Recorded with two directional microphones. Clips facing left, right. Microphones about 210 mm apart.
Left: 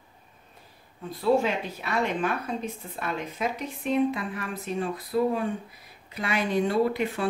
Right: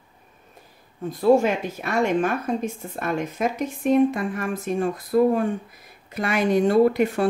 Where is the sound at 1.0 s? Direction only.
45° right (ahead or behind).